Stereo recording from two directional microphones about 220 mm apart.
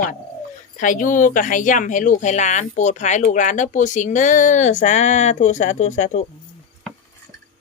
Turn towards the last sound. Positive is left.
turn(degrees=35)  # may be behind; listen again after turning